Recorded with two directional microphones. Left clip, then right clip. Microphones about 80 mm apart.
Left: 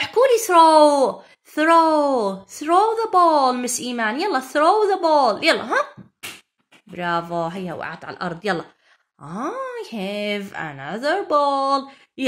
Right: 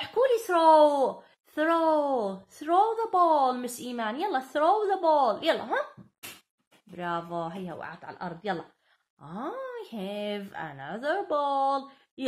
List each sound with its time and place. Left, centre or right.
0.0 s speech: left
7.0 s speech: left
7.7 s speech: left
9.2 s groan: left
9.9 s speech: left